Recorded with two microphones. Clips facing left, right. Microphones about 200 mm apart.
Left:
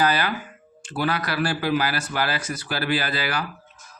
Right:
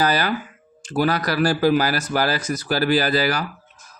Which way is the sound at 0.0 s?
40° right (ahead or behind).